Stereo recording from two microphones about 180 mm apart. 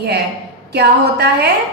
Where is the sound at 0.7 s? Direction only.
65° right (ahead or behind).